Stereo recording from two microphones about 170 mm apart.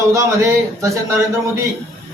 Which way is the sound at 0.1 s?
20° right (ahead or behind).